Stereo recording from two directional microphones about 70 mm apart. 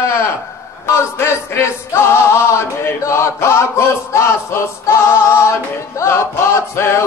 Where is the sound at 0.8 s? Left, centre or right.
Left.